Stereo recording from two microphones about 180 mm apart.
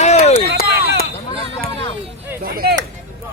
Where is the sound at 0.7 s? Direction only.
65° right (ahead or behind).